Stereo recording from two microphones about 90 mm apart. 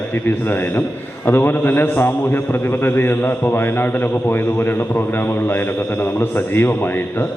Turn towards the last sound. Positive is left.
turn(degrees=25)  # may be behind; listen again after turning